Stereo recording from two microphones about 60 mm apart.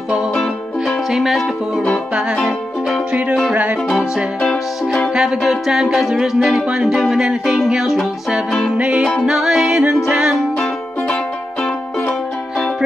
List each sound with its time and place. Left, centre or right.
0.8 s music: centre
3.1 s music: centre
4.4 s music: centre
5.1 s music: centre
8.7 s music: right
9.2 s music: centre